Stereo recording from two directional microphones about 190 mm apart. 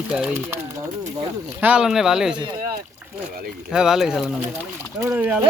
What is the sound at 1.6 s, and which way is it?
Speech, 5° right (ahead or behind).